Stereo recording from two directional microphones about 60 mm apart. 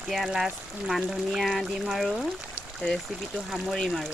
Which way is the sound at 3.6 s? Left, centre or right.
Centre.